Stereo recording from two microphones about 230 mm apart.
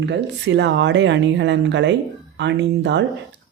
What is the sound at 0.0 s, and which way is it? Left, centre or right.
Speech, right.